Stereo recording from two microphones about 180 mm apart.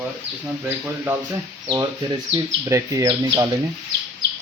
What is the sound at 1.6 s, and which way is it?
Speech, 25° right (ahead or behind).